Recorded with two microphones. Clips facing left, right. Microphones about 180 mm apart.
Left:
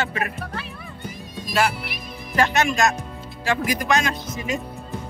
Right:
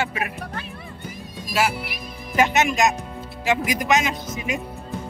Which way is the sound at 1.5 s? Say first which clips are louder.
Left 1 dB; 10° right (ahead or behind).